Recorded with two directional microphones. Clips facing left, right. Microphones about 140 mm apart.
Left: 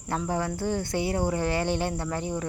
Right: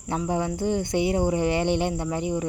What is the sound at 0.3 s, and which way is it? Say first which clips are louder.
Speech: right 4 dB; 15° right (ahead or behind).